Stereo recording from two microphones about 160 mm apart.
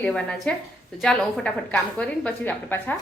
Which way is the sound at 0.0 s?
5° left (ahead or behind).